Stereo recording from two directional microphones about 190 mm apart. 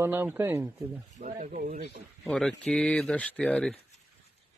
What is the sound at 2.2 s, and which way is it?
A man's voice, 5° left (ahead or behind).